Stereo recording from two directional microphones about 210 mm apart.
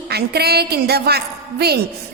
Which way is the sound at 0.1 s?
50° right (ahead or behind).